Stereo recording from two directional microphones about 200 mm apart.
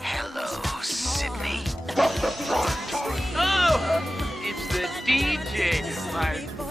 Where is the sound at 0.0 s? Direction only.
Centre (ahead or behind).